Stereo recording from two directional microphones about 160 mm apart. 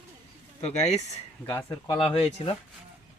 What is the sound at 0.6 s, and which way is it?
Speech, 40° left (ahead or behind).